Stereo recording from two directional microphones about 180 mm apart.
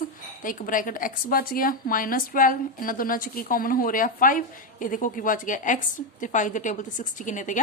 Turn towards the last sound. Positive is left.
turn(degrees=45)  # may be behind; listen again after turning